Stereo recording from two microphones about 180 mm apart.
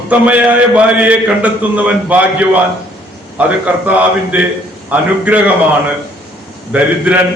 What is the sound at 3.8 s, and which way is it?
A man's voice, 5° right (ahead or behind).